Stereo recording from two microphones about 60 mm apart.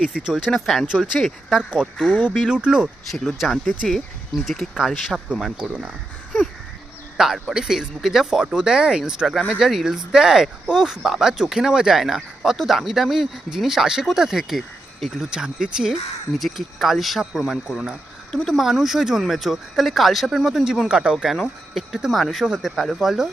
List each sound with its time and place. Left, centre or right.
0.3 s speech: centre
0.5 s speech: centre
0.9 s speech: centre
3.1 s speech: centre
7.2 s speech: centre
16.8 s speech: centre
18.3 s speech: centre
18.5 s speech: centre